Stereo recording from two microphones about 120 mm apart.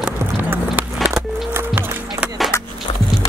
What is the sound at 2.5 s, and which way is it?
Music, 20° left (ahead or behind).